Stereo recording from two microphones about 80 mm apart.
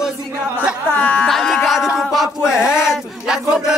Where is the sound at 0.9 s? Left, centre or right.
Left.